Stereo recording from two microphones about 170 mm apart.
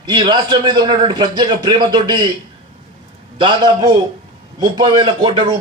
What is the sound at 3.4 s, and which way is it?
A man's voice, 25° right (ahead or behind).